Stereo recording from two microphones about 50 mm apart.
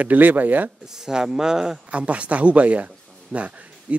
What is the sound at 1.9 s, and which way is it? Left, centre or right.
A man's voice, right.